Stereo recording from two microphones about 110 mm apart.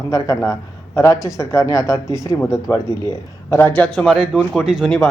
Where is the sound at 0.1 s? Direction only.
30° left (ahead or behind).